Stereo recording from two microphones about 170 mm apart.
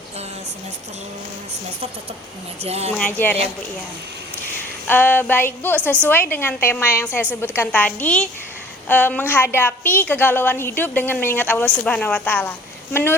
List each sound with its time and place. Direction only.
2.6 s speech: 35° right (ahead or behind)
3.0 s a woman's voice: 10° left (ahead or behind)
4.9 s a woman's voice: 10° left (ahead or behind)